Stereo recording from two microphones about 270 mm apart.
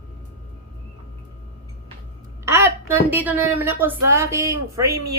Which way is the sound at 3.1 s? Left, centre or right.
Centre.